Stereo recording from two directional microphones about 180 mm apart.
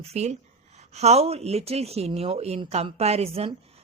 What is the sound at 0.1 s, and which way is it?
Speech, 35° right (ahead or behind).